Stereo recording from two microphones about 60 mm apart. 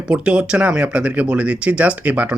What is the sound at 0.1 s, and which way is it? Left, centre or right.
Speech, centre.